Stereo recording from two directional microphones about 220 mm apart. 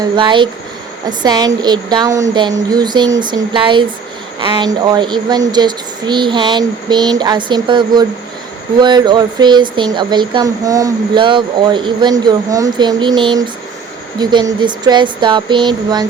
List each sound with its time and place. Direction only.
0.0 s speech: 20° right (ahead or behind)